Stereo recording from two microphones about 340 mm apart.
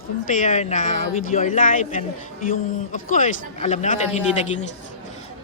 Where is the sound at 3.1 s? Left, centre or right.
Left.